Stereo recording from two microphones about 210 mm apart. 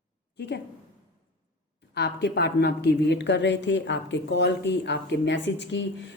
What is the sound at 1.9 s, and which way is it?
A woman's voice, 50° left (ahead or behind).